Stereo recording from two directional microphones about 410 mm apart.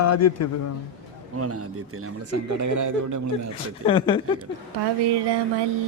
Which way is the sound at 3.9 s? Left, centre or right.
Centre.